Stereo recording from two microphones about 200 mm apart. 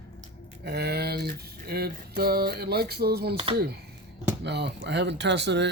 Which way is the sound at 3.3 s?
25° right (ahead or behind).